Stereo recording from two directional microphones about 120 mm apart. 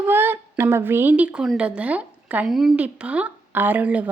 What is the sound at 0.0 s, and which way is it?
A woman's voice, 20° right (ahead or behind).